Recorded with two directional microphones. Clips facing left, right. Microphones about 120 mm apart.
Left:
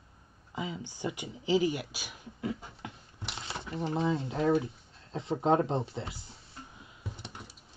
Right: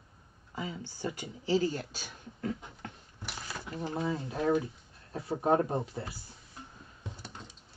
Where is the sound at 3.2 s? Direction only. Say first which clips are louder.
Left 2 dB; 25° left (ahead or behind).